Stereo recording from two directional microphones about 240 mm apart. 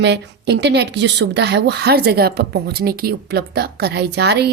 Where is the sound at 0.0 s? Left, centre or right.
Right.